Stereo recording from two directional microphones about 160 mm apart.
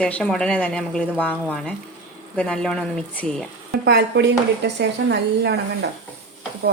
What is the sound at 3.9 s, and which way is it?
Speech, 90° right.